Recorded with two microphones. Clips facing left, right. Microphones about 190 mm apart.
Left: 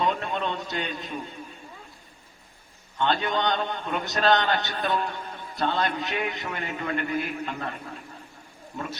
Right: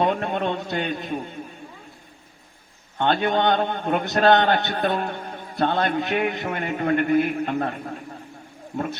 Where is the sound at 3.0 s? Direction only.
55° right (ahead or behind).